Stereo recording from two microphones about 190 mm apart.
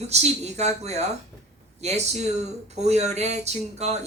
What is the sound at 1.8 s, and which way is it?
Speech, 35° right (ahead or behind).